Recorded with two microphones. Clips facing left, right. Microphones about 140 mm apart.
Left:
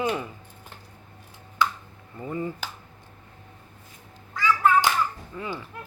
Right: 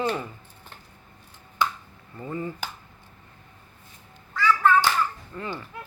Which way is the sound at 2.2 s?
20° left (ahead or behind).